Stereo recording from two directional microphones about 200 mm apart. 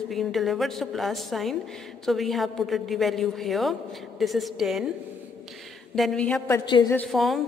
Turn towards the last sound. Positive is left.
turn(degrees=0)  # may be behind; listen again after turning